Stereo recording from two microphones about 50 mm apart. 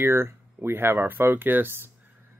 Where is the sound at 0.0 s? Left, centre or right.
Right.